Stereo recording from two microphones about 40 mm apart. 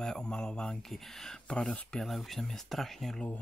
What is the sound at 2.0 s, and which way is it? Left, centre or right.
Speech, centre.